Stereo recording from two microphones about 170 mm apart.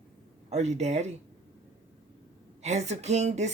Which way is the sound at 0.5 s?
40° right (ahead or behind).